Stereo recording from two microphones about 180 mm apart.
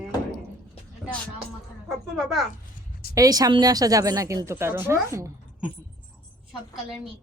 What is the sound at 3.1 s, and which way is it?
Speech, 20° right (ahead or behind).